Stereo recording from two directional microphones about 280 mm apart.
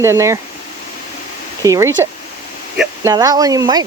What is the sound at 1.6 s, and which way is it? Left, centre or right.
Speech, centre.